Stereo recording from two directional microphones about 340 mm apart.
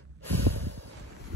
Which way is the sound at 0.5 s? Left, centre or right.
Right.